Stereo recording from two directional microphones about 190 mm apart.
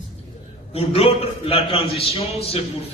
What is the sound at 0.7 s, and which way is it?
A man's voice, 30° left (ahead or behind).